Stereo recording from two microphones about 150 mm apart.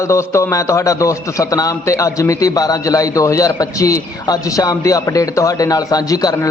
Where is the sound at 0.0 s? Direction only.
20° left (ahead or behind).